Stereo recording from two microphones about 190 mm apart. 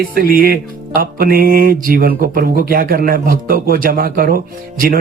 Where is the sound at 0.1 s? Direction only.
50° right (ahead or behind).